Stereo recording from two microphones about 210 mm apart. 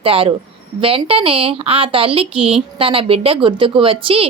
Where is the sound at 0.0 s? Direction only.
25° right (ahead or behind).